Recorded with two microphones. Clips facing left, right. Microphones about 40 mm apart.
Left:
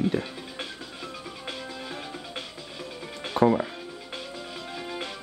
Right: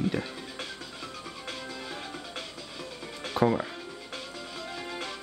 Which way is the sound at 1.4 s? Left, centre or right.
Centre.